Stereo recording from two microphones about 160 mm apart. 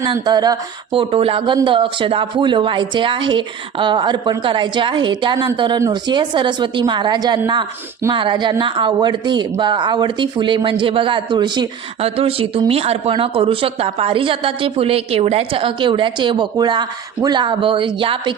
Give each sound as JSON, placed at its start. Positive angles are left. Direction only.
{"t": 0.0, "sound": "speech", "side_deg": -25}
{"t": 1.1, "sound": "a man's voice", "side_deg": -35}